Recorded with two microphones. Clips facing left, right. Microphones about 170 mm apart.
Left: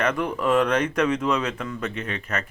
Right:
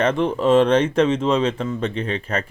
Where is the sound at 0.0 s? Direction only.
25° right (ahead or behind).